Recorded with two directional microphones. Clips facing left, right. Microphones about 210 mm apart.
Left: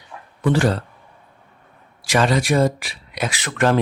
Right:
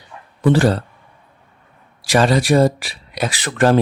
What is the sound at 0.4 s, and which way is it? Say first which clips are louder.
Speech: right 4 dB; 35° right (ahead or behind).